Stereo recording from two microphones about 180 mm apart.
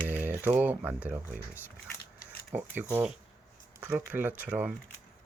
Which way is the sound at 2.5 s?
10° right (ahead or behind).